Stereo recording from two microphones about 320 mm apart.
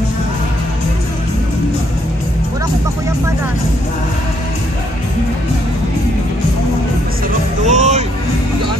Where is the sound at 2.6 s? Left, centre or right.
Centre.